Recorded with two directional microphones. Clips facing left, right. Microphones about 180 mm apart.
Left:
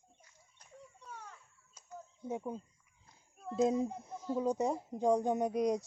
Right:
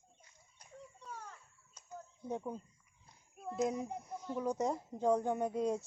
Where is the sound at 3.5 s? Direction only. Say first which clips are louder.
Left 5 dB; 25° left (ahead or behind).